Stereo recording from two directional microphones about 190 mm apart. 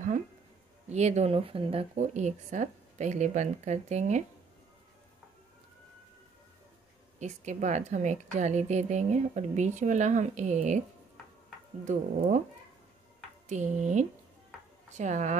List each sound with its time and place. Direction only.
0.8 s a woman's voice: 35° right (ahead or behind)
7.2 s a woman's voice: 40° right (ahead or behind)
11.8 s a woman's voice: 40° right (ahead or behind)
13.5 s a woman's voice: 40° right (ahead or behind)